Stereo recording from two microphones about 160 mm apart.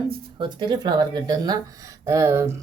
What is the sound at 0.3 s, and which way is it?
A woman's voice, 25° right (ahead or behind).